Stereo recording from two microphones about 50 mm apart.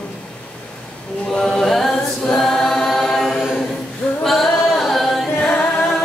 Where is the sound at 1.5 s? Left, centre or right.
Centre.